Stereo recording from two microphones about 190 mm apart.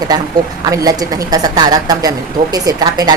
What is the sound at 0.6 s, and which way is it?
A woman's voice, 20° right (ahead or behind).